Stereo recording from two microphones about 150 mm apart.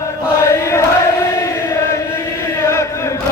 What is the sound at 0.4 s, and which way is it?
Chant, 20° left (ahead or behind).